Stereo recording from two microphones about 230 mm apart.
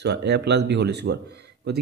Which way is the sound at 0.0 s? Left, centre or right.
Right.